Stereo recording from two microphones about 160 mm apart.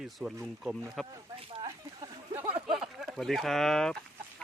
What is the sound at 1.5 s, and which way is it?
Speech, 30° right (ahead or behind).